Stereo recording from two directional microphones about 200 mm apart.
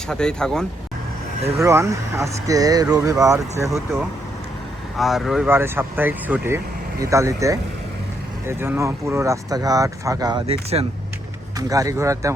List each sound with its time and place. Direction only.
0.1 s speech: 5° left (ahead or behind)
1.6 s speech: 15° right (ahead or behind)
4.9 s speech: centre (ahead or behind); by 10.4 s 20° right (ahead or behind)
10.4 s speech: 30° right (ahead or behind)
11.7 s speech: 15° right (ahead or behind)